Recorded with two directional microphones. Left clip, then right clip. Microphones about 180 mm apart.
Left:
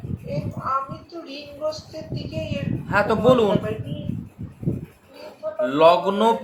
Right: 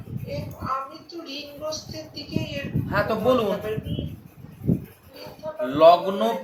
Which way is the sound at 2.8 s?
45° left (ahead or behind).